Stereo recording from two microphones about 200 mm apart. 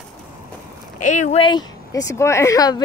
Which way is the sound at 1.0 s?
40° left (ahead or behind).